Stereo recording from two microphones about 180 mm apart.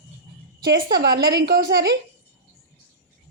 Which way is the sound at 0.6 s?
65° right (ahead or behind).